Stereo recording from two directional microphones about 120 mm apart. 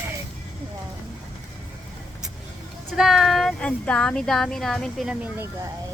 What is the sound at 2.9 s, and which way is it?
Speech, centre (ahead or behind).